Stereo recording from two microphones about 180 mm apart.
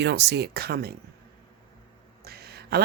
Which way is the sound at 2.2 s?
60° right (ahead or behind).